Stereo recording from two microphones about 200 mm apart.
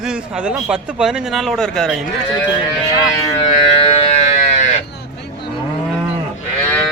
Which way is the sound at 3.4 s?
30° left (ahead or behind).